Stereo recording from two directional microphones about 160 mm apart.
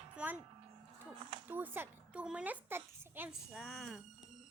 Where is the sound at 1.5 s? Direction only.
10° right (ahead or behind).